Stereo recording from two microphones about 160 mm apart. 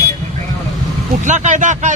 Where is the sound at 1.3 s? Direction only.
50° right (ahead or behind).